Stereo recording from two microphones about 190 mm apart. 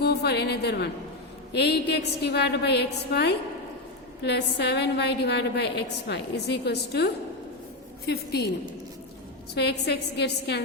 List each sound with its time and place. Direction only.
0.0 s a woman's voice: 60° left (ahead or behind)
9.6 s a woman's voice: 60° left (ahead or behind)